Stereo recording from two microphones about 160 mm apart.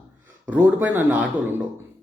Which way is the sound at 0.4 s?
10° right (ahead or behind).